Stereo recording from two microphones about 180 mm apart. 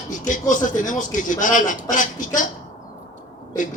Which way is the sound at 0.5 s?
45° left (ahead or behind).